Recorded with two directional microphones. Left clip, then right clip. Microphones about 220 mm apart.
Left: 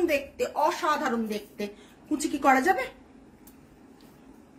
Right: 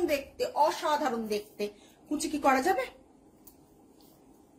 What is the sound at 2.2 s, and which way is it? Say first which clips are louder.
Speech: left 4 dB; 15° left (ahead or behind).